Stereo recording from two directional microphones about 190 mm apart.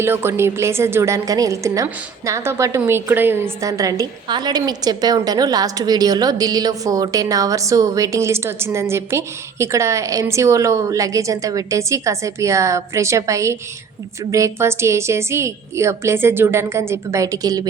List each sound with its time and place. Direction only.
0.0 s a woman's voice: 10° right (ahead or behind)